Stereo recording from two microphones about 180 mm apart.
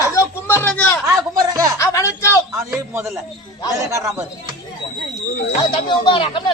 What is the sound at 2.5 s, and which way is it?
A man's voice, 10° right (ahead or behind).